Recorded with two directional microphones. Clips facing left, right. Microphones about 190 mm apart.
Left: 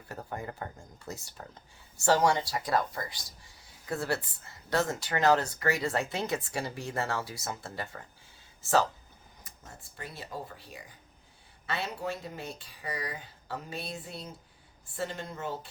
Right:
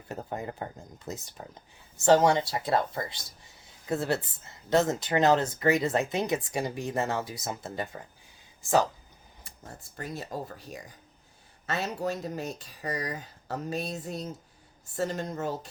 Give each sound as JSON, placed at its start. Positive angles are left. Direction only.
{"t": 0.1, "sound": "speech", "side_deg": -20}
{"t": 9.4, "sound": "speech", "side_deg": -40}